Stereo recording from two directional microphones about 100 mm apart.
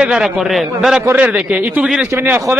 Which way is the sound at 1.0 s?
20° right (ahead or behind).